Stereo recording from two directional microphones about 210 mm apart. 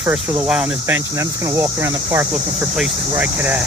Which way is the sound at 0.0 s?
5° right (ahead or behind).